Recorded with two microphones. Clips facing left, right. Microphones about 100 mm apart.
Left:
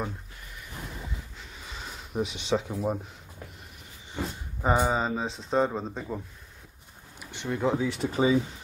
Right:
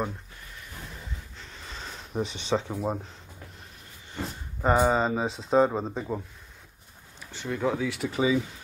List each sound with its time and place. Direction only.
1.4 s a sound: 10° left (ahead or behind)
2.7 s speech: 15° right (ahead or behind)
4.6 s speech: centre (ahead or behind)
7.2 s speech: 20° left (ahead or behind); by 8.4 s 35° left (ahead or behind)